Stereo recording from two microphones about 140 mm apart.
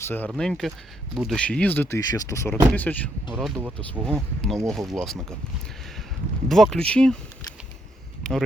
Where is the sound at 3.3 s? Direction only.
Centre (ahead or behind).